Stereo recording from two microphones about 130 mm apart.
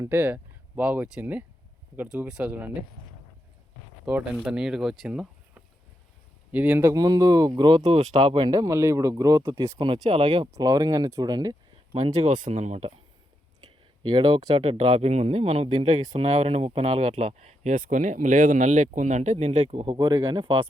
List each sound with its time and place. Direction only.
0.1 s speech: 15° right (ahead or behind)
4.0 s speech: 5° right (ahead or behind)
6.9 s speech: 30° right (ahead or behind)
7.9 s speech: 50° right (ahead or behind)
8.4 s speech: 25° right (ahead or behind)
9.7 s speech: 40° right (ahead or behind)
10.5 s speech: 25° right (ahead or behind)
11.9 s speech: 50° right (ahead or behind)
12.4 s speech: 65° right (ahead or behind)
14.0 s speech: 35° right (ahead or behind)